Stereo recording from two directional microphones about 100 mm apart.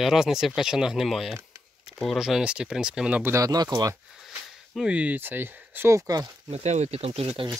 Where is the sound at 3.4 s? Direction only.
40° right (ahead or behind).